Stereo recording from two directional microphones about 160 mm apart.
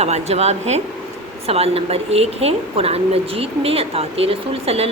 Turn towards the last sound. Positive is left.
turn(degrees=-40)  # may be behind; listen again after turning